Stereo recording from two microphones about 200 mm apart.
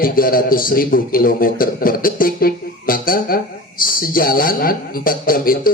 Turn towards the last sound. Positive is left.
turn(degrees=45)  # may be behind; listen again after turning